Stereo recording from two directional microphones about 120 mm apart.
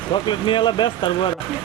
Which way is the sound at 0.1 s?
40° left (ahead or behind).